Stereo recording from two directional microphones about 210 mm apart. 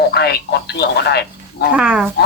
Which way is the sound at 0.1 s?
50° left (ahead or behind).